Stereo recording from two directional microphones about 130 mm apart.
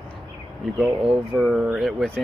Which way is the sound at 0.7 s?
5° right (ahead or behind).